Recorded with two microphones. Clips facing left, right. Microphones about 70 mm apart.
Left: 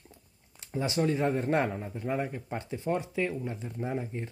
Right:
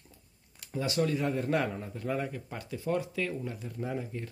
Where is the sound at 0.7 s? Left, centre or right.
Left.